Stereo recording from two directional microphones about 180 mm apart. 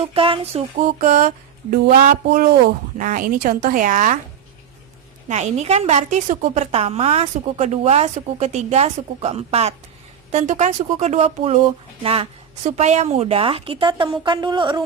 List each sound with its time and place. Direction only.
0.0 s a woman's voice: 30° right (ahead or behind)
5.3 s a woman's voice: 40° right (ahead or behind)
14.3 s a sound: 25° right (ahead or behind)